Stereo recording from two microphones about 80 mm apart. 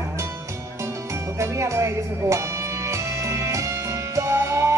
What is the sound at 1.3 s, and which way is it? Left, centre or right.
Music, right.